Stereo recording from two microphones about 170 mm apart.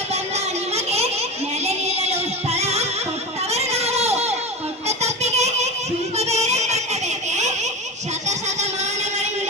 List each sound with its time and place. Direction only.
0.1 s child singing: 40° right (ahead or behind)
1.6 s music: 40° right (ahead or behind)
3.5 s a sound: 40° right (ahead or behind)
6.1 s music: 40° right (ahead or behind)
7.3 s baby laughter: 45° right (ahead or behind)
8.3 s a sound: 40° right (ahead or behind)